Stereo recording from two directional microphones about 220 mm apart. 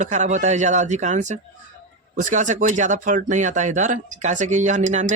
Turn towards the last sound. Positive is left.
turn(degrees=-35)  # may be behind; listen again after turning